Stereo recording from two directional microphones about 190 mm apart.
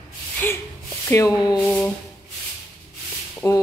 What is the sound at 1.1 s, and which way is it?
Speech, 20° left (ahead or behind).